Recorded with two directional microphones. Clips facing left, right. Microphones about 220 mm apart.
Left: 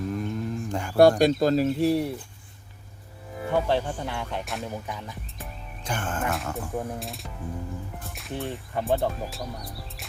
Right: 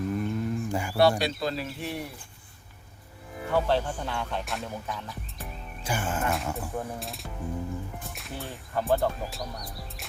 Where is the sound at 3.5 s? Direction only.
15° left (ahead or behind).